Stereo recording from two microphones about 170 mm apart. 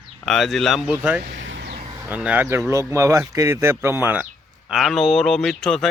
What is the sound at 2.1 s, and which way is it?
A man's voice, 10° right (ahead or behind).